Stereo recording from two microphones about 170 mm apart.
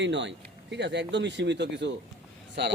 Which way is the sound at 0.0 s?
90° right.